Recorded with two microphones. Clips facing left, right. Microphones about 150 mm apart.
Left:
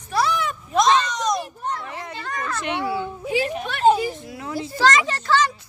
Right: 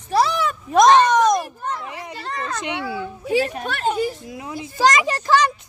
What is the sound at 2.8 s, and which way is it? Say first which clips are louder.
Speech: left 2 dB; 30° left (ahead or behind).